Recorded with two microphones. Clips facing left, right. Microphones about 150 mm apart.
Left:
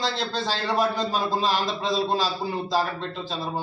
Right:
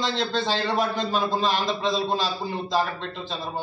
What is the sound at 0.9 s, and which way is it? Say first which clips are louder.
Speech: even; 35° left (ahead or behind).